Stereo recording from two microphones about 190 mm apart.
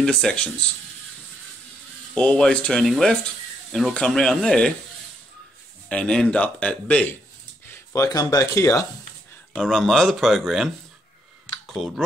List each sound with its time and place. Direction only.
0.0 s speech: 5° left (ahead or behind)
2.1 s speech: 5° left (ahead or behind)
5.9 s speech: 5° left (ahead or behind)
7.7 s speech: 15° left (ahead or behind)
9.5 s speech: centre (ahead or behind)